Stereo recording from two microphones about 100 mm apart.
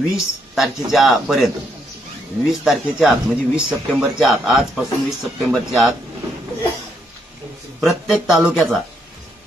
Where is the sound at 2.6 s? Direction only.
Centre (ahead or behind).